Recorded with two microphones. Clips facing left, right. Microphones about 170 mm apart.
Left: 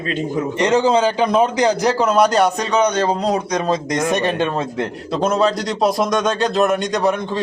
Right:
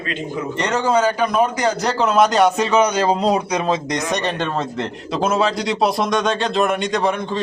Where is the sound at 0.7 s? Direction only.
20° left (ahead or behind).